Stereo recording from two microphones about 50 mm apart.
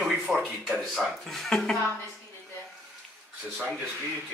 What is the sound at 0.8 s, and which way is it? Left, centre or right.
Speech, centre.